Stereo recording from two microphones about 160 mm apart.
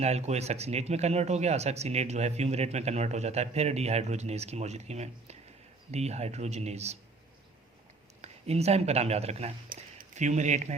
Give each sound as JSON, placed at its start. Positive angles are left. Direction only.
{"t": 0.0, "sound": "speech", "side_deg": -45}
{"t": 8.2, "sound": "speech", "side_deg": -40}
{"t": 9.6, "sound": "speech", "side_deg": -55}